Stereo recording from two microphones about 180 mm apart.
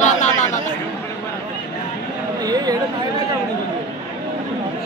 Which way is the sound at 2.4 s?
20° right (ahead or behind).